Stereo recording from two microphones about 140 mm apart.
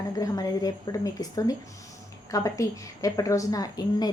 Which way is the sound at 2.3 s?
25° left (ahead or behind).